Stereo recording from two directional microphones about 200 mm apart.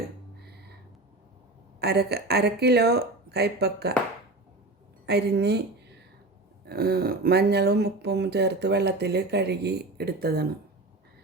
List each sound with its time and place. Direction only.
1.8 s speech: 55° right (ahead or behind)
5.0 s speech: 55° right (ahead or behind)
6.7 s speech: 50° right (ahead or behind)